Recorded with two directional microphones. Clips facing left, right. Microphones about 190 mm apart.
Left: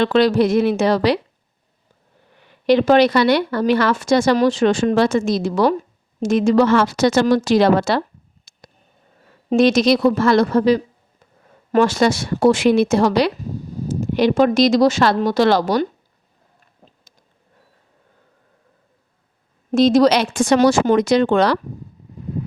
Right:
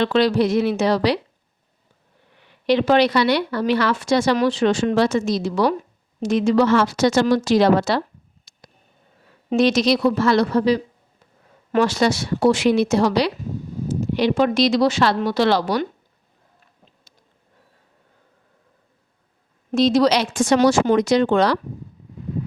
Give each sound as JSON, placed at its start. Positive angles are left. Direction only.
{"t": 0.0, "sound": "speech", "side_deg": 50}
{"t": 2.6, "sound": "a woman's voice", "side_deg": 45}
{"t": 8.5, "sound": "a sound", "side_deg": 50}
{"t": 9.5, "sound": "speech", "side_deg": 50}
{"t": 16.8, "sound": "a sound", "side_deg": 45}
{"t": 19.7, "sound": "a woman's voice", "side_deg": 50}